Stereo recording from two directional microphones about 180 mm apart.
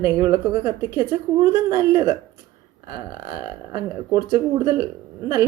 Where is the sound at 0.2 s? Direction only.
20° right (ahead or behind).